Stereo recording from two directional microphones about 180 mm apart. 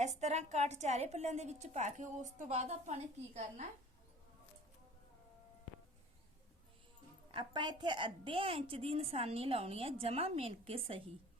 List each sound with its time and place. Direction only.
0.0 s a woman's voice: 40° right (ahead or behind)
7.3 s a woman's voice: 25° right (ahead or behind)